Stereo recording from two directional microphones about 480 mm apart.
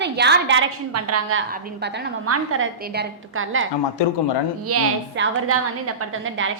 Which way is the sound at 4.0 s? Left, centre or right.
Left.